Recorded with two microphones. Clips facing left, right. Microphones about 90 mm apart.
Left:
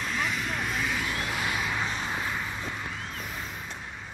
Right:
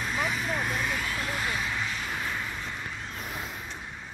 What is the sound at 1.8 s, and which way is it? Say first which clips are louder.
Vehicle: left 2 dB; 25° left (ahead or behind).